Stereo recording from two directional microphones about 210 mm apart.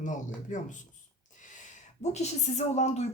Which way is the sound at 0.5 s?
35° left (ahead or behind).